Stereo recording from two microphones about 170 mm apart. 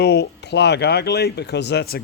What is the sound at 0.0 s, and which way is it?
Speech, 80° left.